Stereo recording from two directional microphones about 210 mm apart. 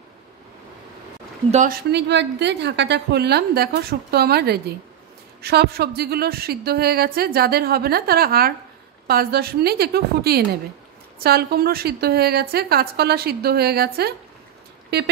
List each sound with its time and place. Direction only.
1.5 s a woman's voice: 40° right (ahead or behind)